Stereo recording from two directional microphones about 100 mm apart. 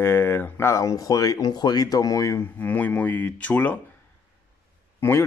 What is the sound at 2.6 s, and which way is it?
Speech, 15° left (ahead or behind).